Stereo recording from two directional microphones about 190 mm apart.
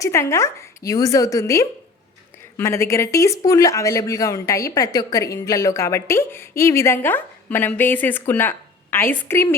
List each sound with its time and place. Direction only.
0.0 s speech: 15° left (ahead or behind)